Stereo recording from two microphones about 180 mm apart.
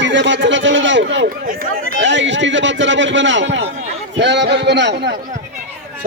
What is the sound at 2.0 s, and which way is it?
A man's voice, 90° right.